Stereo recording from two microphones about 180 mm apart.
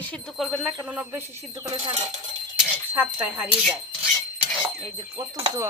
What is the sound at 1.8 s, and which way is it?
Speech, 35° right (ahead or behind).